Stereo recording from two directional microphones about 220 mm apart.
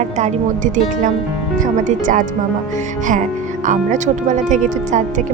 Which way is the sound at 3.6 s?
35° right (ahead or behind).